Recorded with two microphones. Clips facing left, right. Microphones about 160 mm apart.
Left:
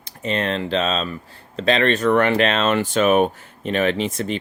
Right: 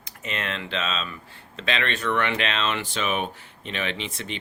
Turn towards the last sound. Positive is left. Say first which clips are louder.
# left 10 dB
turn(degrees=45)  # may be behind; listen again after turning